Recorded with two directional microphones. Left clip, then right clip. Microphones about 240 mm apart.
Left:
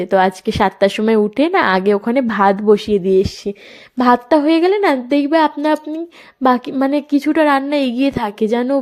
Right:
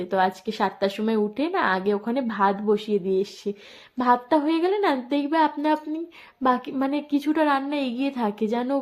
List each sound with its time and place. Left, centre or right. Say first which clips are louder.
0.0 s a woman's voice: left 9 dB; left